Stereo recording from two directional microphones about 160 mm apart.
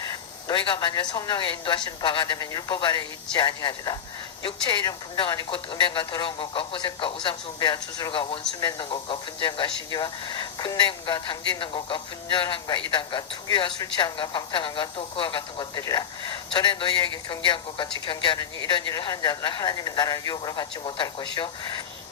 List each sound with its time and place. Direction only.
0.4 s speech: 30° left (ahead or behind)